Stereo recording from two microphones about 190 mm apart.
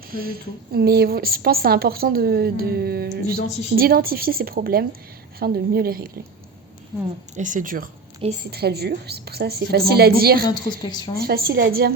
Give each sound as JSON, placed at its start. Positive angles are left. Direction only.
{"t": 0.1, "sound": "a woman's voice", "side_deg": -50}
{"t": 7.3, "sound": "a woman's voice", "side_deg": -40}
{"t": 8.4, "sound": "a woman's voice", "side_deg": -55}
{"t": 10.4, "sound": "a woman's voice", "side_deg": 20}
{"t": 11.2, "sound": "a woman's voice", "side_deg": -55}